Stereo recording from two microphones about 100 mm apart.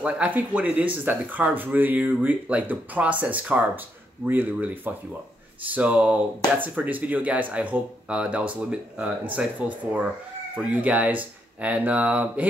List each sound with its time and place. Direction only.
0.0 s speech: 15° right (ahead or behind)